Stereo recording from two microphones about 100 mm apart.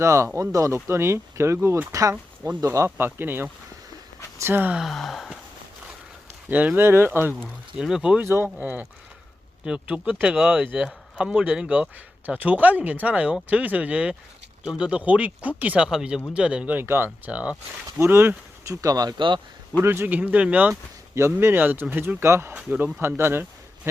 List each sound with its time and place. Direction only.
0.0 s speech: 30° right (ahead or behind)
4.8 s gasp: centre (ahead or behind)
6.5 s speech: 15° right (ahead or behind)
7.8 s speech: 5° right (ahead or behind)
8.2 s speech: 25° right (ahead or behind)
18.0 s speech: 25° right (ahead or behind); by 19.4 s 45° right (ahead or behind)
19.8 s speech: 25° right (ahead or behind)
21.2 s speech: 25° right (ahead or behind)